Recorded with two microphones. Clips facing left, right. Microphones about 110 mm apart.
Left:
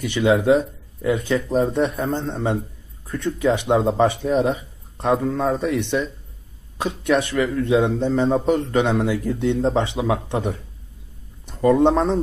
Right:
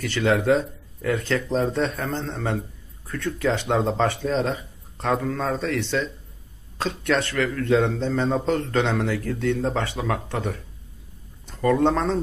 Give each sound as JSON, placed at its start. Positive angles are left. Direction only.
{"t": 0.0, "sound": "a man's voice", "side_deg": 15}